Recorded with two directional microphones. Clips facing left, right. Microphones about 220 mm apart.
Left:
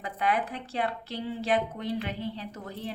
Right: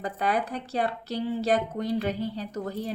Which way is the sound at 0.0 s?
40° right (ahead or behind).